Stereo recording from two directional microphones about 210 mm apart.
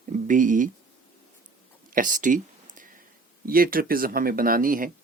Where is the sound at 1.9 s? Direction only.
40° right (ahead or behind).